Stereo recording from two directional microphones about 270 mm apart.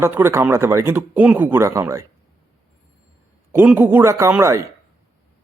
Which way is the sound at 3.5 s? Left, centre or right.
Centre.